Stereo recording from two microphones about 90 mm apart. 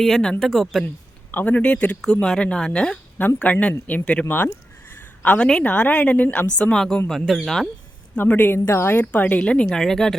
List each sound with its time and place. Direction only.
0.0 s speech: 5° left (ahead or behind)
1.3 s speech: 20° left (ahead or behind); by 7.7 s centre (ahead or behind)
8.1 s speech: 20° left (ahead or behind)